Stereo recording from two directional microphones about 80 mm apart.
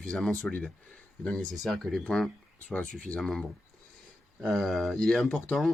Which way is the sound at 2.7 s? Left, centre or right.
Centre.